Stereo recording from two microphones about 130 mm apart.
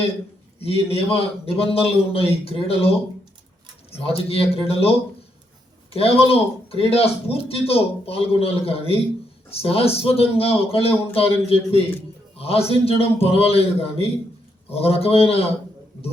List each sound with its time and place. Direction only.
0.6 s speech: 50° left (ahead or behind)
3.9 s speech: 50° left (ahead or behind)